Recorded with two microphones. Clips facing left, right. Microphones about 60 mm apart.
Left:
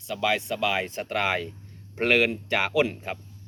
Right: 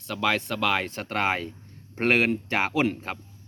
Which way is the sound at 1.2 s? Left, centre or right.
Right.